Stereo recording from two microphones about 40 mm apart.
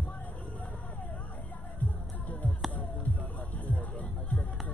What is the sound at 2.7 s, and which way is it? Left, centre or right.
Music, left.